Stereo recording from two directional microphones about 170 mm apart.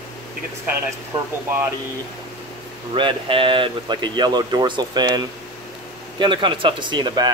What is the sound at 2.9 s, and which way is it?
Speech, 30° right (ahead or behind).